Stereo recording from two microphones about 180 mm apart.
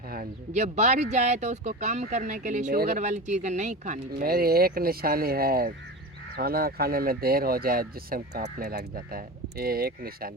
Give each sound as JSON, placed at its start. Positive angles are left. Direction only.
{"t": 0.1, "sound": "speech", "side_deg": -45}
{"t": 4.1, "sound": "speech", "side_deg": -55}